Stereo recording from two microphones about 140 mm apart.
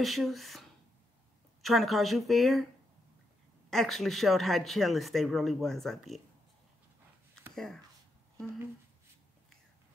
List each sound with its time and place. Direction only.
0.0 s speech: centre (ahead or behind)
3.7 s speech: centre (ahead or behind)
7.5 s speech: 5° left (ahead or behind)